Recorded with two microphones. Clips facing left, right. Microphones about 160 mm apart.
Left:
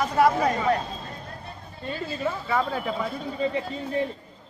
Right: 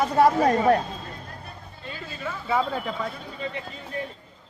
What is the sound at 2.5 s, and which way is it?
Speech, 10° right (ahead or behind).